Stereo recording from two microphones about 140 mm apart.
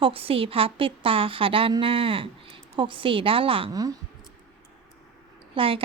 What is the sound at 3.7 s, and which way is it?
Speech, 25° right (ahead or behind).